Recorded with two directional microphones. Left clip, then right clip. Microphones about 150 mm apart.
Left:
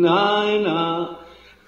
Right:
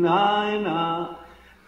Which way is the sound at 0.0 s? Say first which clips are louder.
Left 3 dB; 35° left (ahead or behind).